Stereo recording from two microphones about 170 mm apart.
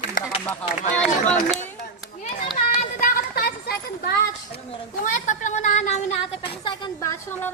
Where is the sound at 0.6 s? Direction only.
10° left (ahead or behind).